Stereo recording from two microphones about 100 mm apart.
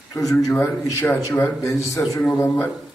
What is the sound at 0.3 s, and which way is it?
A man's voice, 30° left (ahead or behind).